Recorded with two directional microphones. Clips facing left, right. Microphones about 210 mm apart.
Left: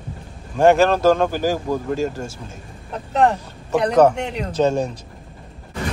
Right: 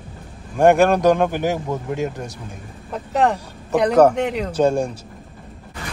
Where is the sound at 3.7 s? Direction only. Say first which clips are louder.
Right 1 dB; 10° right (ahead or behind).